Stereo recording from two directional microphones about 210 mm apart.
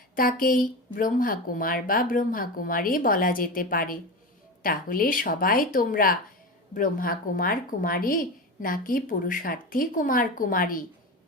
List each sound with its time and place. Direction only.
0.2 s a woman's voice: 45° left (ahead or behind)